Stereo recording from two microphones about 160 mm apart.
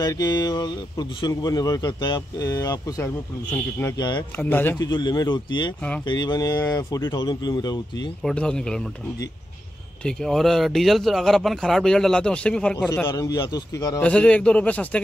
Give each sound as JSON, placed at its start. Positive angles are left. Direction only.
{"t": 0.0, "sound": "speech", "side_deg": 25}
{"t": 4.4, "sound": "a man's voice", "side_deg": 10}
{"t": 4.7, "sound": "speech", "side_deg": 25}
{"t": 8.2, "sound": "speech", "side_deg": 5}
{"t": 10.0, "sound": "speech", "side_deg": 0}
{"t": 13.0, "sound": "speech", "side_deg": 25}
{"t": 14.0, "sound": "a man's voice", "side_deg": 10}